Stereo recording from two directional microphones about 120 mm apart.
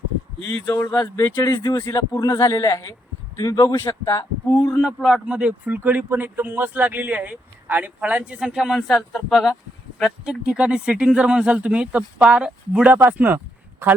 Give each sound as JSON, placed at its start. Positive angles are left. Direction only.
{"t": 0.4, "sound": "speech", "side_deg": 25}
{"t": 1.4, "sound": "speech", "side_deg": 35}
{"t": 2.0, "sound": "speech", "side_deg": 35}
{"t": 4.8, "sound": "speech", "side_deg": -5}